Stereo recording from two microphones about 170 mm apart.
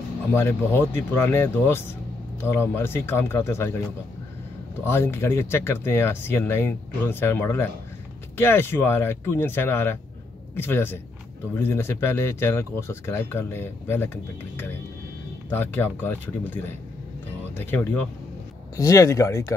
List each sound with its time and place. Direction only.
0.3 s speech: 15° left (ahead or behind)
4.8 s speech: 15° left (ahead or behind)
15.5 s speech: 10° left (ahead or behind)